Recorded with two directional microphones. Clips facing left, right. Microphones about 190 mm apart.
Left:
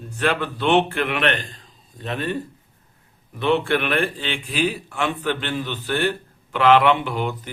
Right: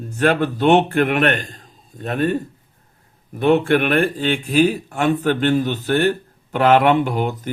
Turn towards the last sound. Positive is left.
turn(degrees=-45)  # may be behind; listen again after turning